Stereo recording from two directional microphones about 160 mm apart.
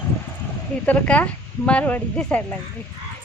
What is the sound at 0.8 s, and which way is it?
A woman's voice, 10° left (ahead or behind).